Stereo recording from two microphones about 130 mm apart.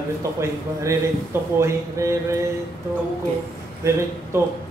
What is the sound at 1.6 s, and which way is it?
Speech, 20° right (ahead or behind).